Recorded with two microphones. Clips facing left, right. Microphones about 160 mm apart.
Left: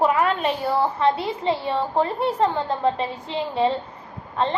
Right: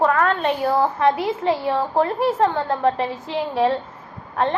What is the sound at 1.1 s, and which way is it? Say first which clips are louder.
A woman's voice: right 3 dB; 10° right (ahead or behind).